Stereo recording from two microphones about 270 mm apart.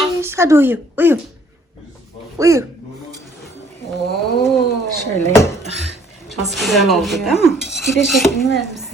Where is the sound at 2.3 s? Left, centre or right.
Centre.